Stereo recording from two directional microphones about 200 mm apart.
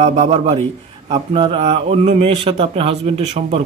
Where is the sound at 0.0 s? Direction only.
35° right (ahead or behind).